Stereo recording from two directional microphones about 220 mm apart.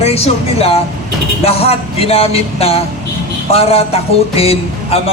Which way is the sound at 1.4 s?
25° left (ahead or behind).